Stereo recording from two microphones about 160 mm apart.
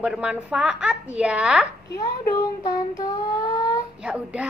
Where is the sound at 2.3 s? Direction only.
25° left (ahead or behind).